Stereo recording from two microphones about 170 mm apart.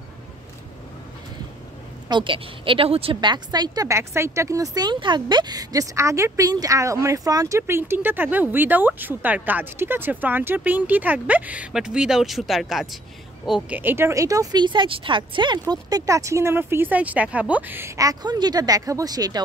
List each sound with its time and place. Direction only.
2.0 s a woman's voice: 30° right (ahead or behind)